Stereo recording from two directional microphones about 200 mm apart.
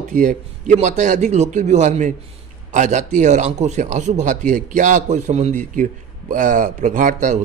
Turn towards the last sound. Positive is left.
turn(degrees=-40)  # may be behind; listen again after turning